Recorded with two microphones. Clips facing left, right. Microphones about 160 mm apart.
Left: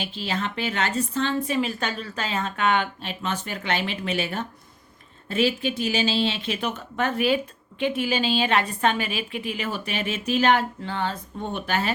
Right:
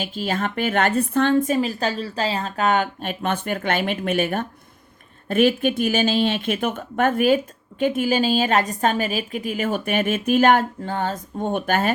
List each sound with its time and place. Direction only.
0.0 s speech: 45° right (ahead or behind)